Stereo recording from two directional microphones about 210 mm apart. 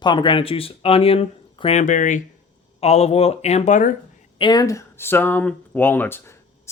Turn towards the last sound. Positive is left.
turn(degrees=10)  # may be behind; listen again after turning